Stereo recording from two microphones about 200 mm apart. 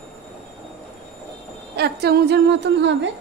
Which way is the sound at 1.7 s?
55° right (ahead or behind).